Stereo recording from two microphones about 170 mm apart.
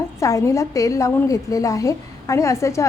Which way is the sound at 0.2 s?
20° left (ahead or behind).